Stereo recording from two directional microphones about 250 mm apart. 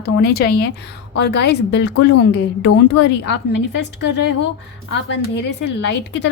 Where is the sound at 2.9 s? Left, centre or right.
Left.